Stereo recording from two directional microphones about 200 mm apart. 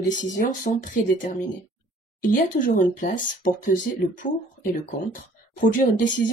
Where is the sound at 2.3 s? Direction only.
40° left (ahead or behind).